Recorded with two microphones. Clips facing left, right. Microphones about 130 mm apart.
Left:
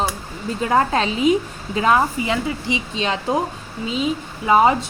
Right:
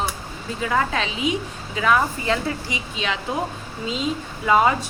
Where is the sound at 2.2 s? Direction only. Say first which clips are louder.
Left 1 dB; 20° left (ahead or behind).